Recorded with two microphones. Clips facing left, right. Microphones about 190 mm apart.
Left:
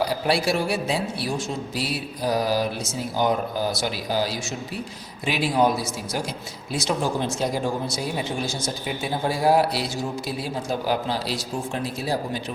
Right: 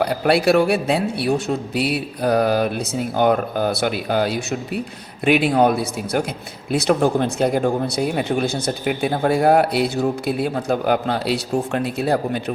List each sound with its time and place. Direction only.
0.0 s speech: 60° right (ahead or behind)